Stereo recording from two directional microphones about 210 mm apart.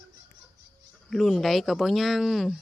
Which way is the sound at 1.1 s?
Centre (ahead or behind).